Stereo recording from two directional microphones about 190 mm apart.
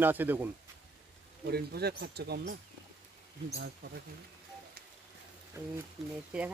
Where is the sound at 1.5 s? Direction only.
55° right (ahead or behind).